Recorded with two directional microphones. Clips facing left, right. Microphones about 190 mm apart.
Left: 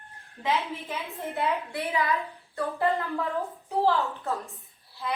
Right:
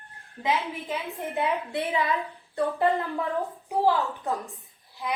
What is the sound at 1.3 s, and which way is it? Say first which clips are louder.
A woman's voice: right 2 dB; 20° right (ahead or behind).